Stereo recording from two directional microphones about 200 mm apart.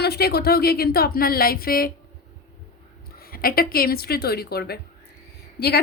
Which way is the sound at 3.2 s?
50° left (ahead or behind).